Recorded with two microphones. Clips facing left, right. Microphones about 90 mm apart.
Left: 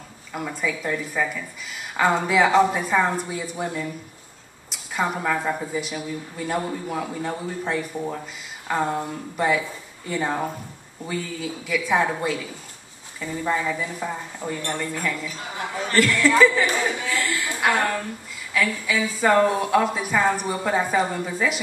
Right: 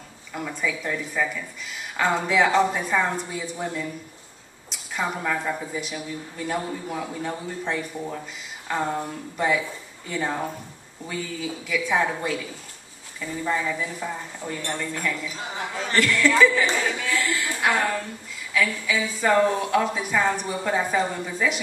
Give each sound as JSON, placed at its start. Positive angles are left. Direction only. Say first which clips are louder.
{"t": 0.3, "sound": "a woman's voice", "louder": "left 1 dB", "side_deg": 5}
{"t": 15.2, "sound": "a woman's voice", "louder": "even", "side_deg": -20}
{"t": 15.6, "sound": "speech", "louder": "left 3 dB", "side_deg": 15}
{"t": 15.9, "sound": "a woman's voice", "louder": "left 2 dB", "side_deg": 0}
{"t": 16.7, "sound": "a sound", "louder": "left 1 dB", "side_deg": 20}
{"t": 17.1, "sound": "a sound", "louder": "even", "side_deg": 0}
{"t": 17.6, "sound": "a woman's voice", "louder": "left 2 dB", "side_deg": 5}